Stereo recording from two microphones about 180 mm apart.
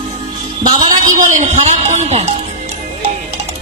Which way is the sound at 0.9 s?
45° right (ahead or behind).